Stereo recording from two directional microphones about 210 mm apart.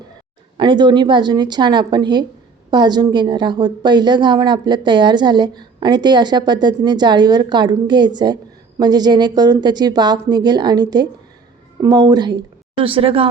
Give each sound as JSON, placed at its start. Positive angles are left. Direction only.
{"t": 0.5, "sound": "a woman's voice", "side_deg": -20}